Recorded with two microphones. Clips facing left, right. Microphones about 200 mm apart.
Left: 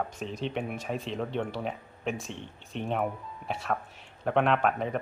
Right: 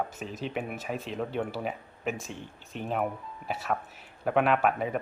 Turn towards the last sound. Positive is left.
turn(degrees=-5)  # may be behind; listen again after turning